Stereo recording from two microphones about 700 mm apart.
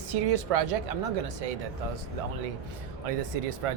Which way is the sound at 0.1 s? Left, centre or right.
Right.